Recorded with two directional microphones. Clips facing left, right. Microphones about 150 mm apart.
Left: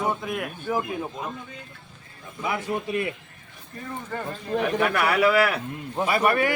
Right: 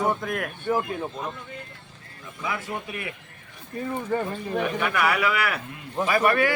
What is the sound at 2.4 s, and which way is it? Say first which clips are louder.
Speech: left 3 dB; 25° left (ahead or behind).